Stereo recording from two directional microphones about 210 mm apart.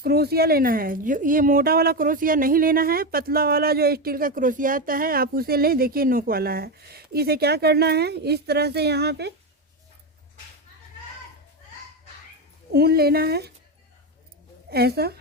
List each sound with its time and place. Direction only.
0.0 s speech: 50° right (ahead or behind)
12.7 s speech: 50° right (ahead or behind)
14.7 s speech: 50° right (ahead or behind)